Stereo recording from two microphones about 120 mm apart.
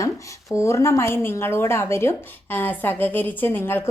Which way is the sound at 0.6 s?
25° left (ahead or behind).